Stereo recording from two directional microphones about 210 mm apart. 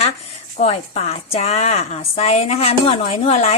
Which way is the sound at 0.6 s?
30° left (ahead or behind).